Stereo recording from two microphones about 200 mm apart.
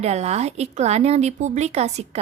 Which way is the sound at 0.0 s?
35° right (ahead or behind).